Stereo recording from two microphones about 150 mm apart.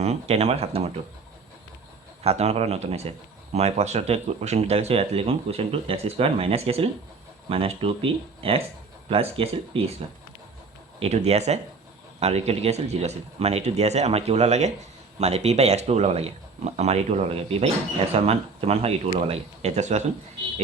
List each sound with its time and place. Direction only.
0.0 s speech: 45° right (ahead or behind)
2.2 s speech: 45° right (ahead or behind)
11.0 s speech: 45° right (ahead or behind)